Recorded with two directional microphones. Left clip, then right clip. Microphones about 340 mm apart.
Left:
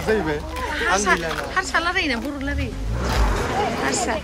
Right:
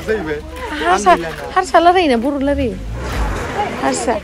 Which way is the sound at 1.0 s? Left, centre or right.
Centre.